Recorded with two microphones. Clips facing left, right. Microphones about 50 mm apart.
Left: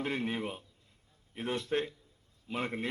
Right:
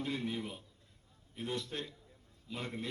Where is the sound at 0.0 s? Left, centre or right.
Left.